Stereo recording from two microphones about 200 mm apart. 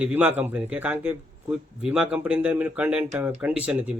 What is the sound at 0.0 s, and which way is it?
Speech, 10° right (ahead or behind).